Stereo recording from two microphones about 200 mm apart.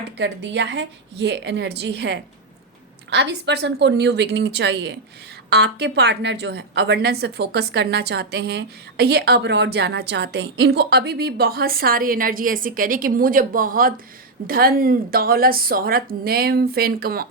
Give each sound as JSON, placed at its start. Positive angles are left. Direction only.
{"t": 0.2, "sound": "a woman's voice", "side_deg": -65}